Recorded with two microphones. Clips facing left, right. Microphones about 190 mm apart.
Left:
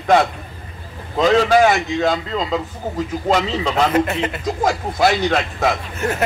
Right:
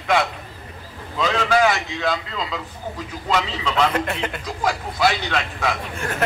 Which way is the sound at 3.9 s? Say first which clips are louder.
Left 6 dB; 5° left (ahead or behind).